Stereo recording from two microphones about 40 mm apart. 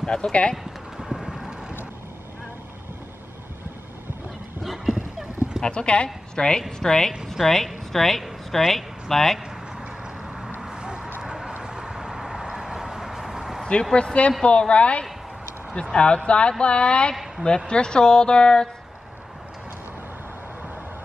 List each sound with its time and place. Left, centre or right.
0.0 s speech: left
0.9 s clip-clop: centre
5.6 s speech: left; by 9.4 s centre
10.6 s a sound: centre
11.6 s vehicle: centre
13.9 s speech: left
17.1 s speech: centre
17.6 s speech: left